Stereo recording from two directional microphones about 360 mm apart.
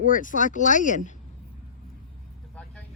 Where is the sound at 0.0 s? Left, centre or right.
Left.